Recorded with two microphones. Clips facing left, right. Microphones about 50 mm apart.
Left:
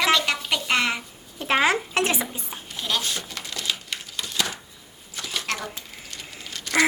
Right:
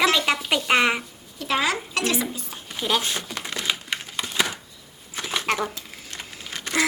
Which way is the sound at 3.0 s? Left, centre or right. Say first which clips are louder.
Right 2 dB; right.